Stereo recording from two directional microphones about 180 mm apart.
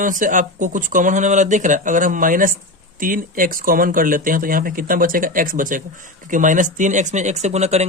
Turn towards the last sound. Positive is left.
turn(degrees=-40)  # may be behind; listen again after turning